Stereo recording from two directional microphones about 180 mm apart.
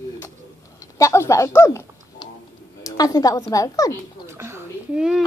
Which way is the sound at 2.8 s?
20° left (ahead or behind).